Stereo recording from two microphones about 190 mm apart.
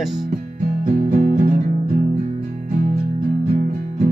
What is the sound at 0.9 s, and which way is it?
Music, 45° right (ahead or behind).